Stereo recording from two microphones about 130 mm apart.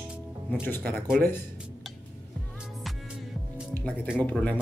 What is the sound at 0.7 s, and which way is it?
Speech, 15° left (ahead or behind).